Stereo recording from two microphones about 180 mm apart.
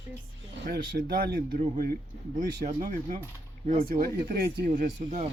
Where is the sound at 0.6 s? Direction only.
60° right (ahead or behind).